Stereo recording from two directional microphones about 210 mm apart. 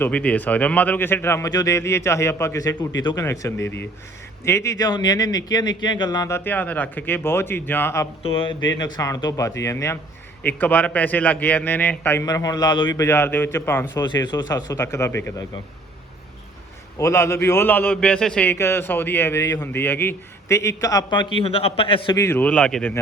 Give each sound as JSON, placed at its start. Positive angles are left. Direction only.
{"t": 0.0, "sound": "a man's voice", "side_deg": 5}
{"t": 8.2, "sound": "a man's voice", "side_deg": 25}
{"t": 17.0, "sound": "a man's voice", "side_deg": 15}
{"t": 22.1, "sound": "a man's voice", "side_deg": 10}